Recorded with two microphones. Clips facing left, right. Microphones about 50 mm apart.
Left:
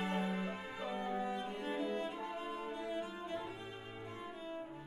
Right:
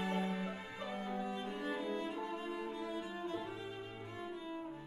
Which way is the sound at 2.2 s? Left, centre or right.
Centre.